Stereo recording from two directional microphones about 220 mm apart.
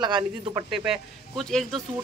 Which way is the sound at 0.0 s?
20° right (ahead or behind).